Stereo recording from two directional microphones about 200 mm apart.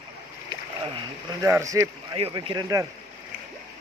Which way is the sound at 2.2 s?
25° right (ahead or behind).